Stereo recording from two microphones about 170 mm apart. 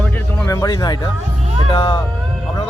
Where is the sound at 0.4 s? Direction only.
20° left (ahead or behind).